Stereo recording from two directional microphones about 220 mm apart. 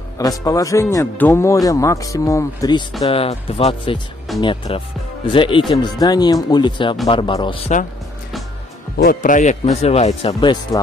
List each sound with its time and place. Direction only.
0.2 s speech: 15° left (ahead or behind)
3.0 s speech: 25° left (ahead or behind)
8.9 s speech: 40° left (ahead or behind); by 10.8 s 20° left (ahead or behind)